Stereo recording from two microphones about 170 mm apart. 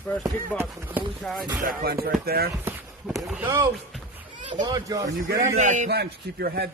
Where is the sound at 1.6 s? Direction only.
65° right (ahead or behind).